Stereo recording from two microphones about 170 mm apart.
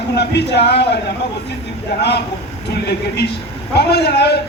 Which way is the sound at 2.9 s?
75° left (ahead or behind).